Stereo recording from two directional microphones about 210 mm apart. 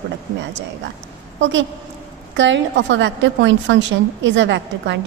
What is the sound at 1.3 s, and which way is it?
A woman's voice, 60° right (ahead or behind).